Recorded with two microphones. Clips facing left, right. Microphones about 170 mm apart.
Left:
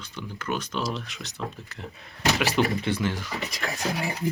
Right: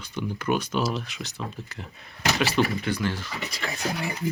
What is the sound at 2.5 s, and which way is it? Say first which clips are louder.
Speech: even; 20° left (ahead or behind).